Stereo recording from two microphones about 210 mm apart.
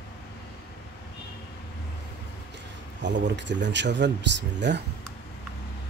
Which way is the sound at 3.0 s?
60° right (ahead or behind).